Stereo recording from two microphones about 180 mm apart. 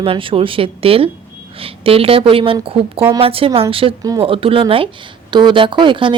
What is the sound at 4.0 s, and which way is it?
Speech, 20° right (ahead or behind).